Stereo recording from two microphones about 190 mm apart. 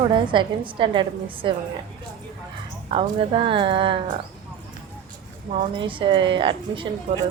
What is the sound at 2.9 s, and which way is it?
A woman's voice, 25° right (ahead or behind).